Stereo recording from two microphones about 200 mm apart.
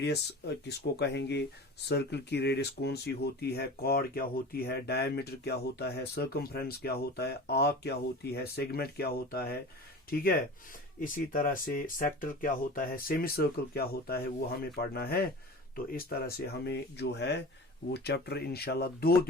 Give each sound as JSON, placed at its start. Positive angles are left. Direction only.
{"t": 0.0, "sound": "speech", "side_deg": 55}
{"t": 11.0, "sound": "speech", "side_deg": 40}